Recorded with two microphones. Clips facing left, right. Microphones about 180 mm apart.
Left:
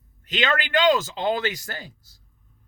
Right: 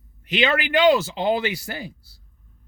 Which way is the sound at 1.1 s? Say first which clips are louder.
Right 2 dB; 10° right (ahead or behind).